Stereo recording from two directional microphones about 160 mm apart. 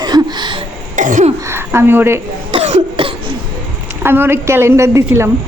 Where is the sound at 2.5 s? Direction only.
40° right (ahead or behind).